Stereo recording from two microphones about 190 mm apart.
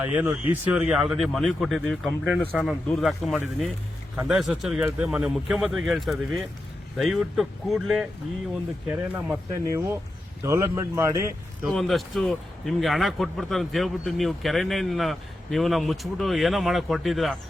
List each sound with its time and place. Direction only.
0.0 s speech: 10° right (ahead or behind)
9.1 s speech: 10° right (ahead or behind)
11.6 s speech: centre (ahead or behind)